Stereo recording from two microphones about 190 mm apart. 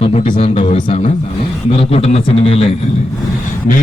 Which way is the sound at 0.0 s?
30° left (ahead or behind).